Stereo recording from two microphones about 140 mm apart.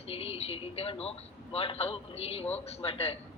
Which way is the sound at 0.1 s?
45° left (ahead or behind).